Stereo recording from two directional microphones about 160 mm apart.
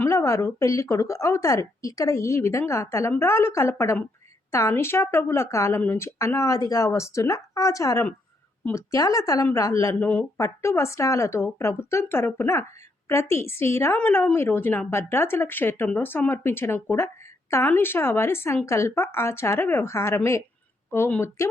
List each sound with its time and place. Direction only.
0.0 s a woman's voice: 20° left (ahead or behind)